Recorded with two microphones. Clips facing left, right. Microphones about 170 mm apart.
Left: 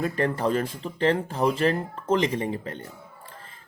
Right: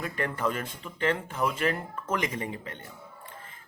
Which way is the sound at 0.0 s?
35° left (ahead or behind).